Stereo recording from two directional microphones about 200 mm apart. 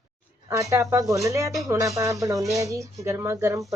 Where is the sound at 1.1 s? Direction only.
15° right (ahead or behind).